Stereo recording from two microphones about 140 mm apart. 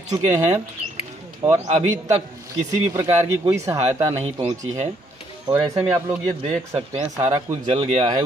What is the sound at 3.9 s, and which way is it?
Speech, 45° right (ahead or behind).